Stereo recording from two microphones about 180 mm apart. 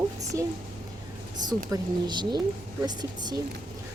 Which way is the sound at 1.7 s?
25° right (ahead or behind).